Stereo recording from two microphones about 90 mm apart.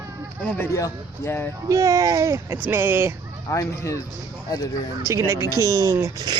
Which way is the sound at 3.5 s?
35° left (ahead or behind).